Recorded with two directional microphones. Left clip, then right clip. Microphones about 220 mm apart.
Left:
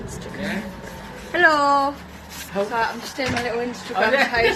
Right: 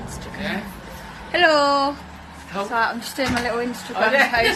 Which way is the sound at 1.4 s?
15° right (ahead or behind).